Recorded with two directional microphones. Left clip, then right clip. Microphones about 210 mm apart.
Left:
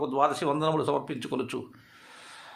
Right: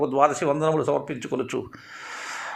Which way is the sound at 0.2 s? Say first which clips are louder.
Right 4 dB; 10° right (ahead or behind).